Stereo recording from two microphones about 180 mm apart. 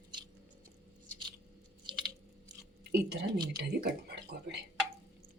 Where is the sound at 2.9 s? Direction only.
65° right (ahead or behind).